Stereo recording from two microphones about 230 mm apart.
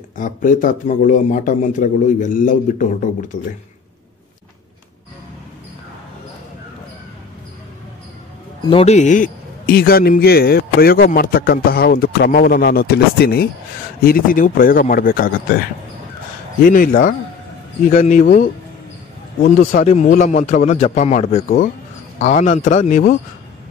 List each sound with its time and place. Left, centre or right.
0.2 s a man's voice: left
8.6 s a man's voice: left
16.6 s a man's voice: left
18.2 s a man's voice: left